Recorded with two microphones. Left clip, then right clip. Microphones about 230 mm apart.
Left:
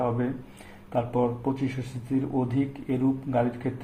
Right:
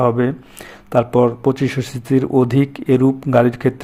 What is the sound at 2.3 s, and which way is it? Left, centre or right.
Speech, right.